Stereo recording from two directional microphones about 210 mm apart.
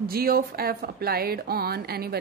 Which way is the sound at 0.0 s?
45° right (ahead or behind).